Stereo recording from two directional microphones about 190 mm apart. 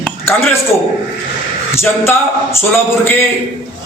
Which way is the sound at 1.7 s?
15° left (ahead or behind).